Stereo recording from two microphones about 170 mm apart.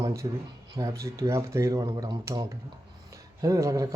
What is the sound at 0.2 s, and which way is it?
Speech, 25° right (ahead or behind).